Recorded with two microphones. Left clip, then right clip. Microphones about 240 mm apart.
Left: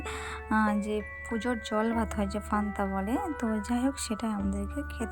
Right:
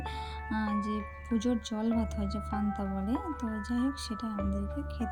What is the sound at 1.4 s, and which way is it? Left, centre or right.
Speech, left.